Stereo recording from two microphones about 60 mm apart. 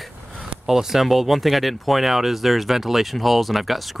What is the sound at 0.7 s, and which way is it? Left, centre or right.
Speech, centre.